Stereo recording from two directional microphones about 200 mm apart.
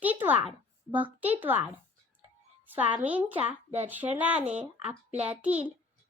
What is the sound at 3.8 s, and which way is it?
Speech, 10° right (ahead or behind).